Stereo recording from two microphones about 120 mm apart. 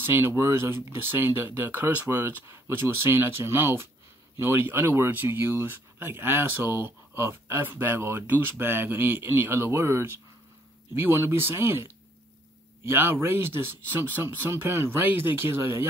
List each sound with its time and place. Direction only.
0.0 s speech: 20° right (ahead or behind)